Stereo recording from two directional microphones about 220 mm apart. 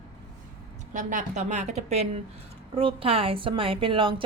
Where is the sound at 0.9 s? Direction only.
35° right (ahead or behind).